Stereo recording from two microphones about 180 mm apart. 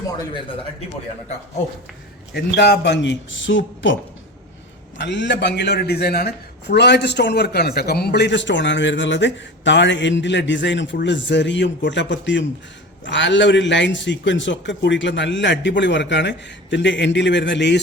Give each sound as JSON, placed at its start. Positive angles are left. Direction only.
{"t": 2.3, "sound": "a man's voice", "side_deg": 65}
{"t": 4.9, "sound": "a man's voice", "side_deg": 80}